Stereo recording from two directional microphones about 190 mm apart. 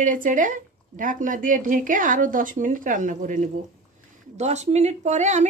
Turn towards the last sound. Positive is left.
turn(degrees=-40)  # may be behind; listen again after turning